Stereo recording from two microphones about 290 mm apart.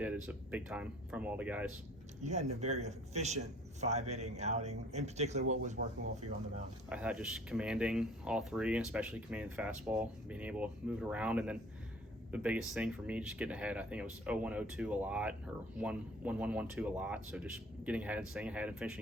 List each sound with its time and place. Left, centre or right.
0.0 s speech: centre
2.2 s a man's voice: right
6.9 s speech: centre